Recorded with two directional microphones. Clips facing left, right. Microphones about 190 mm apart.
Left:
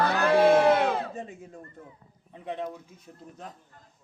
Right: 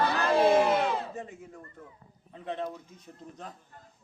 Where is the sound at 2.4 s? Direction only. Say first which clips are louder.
Left 1 dB; 10° left (ahead or behind).